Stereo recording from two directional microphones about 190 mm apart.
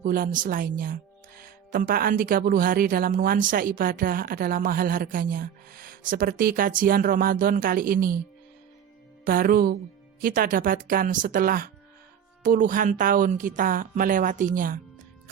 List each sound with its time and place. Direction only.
0.0 s a woman's voice: 50° right (ahead or behind)
9.2 s a woman's voice: 50° right (ahead or behind)